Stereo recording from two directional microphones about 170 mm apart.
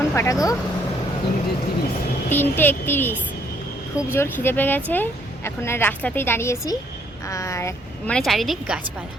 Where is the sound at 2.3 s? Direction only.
10° left (ahead or behind).